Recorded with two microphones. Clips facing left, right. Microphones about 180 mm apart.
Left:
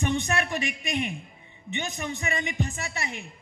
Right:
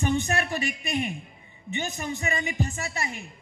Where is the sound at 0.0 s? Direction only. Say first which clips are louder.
Right 1 dB; 40° right (ahead or behind).